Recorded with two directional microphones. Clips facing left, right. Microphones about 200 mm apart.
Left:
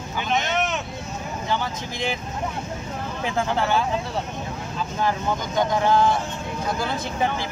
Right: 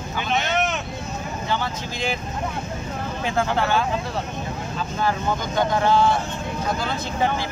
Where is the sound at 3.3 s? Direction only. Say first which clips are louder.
Right 1 dB; 15° left (ahead or behind).